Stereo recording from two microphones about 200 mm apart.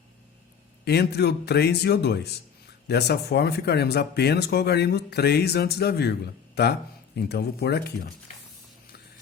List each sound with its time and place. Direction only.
0.9 s speech: 55° left (ahead or behind)